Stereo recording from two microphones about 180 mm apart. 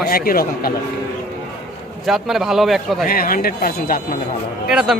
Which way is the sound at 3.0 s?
55° left (ahead or behind).